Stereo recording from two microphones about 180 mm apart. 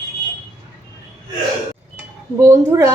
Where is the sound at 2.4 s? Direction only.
15° right (ahead or behind).